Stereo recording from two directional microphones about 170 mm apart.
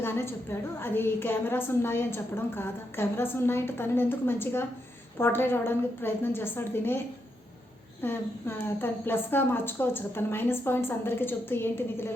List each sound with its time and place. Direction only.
0.0 s a sound: 15° left (ahead or behind)
0.8 s a woman's voice: 15° left (ahead or behind)
8.0 s a woman's voice: 15° left (ahead or behind)